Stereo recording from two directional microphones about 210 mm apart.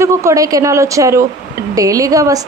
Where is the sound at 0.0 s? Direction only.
15° right (ahead or behind).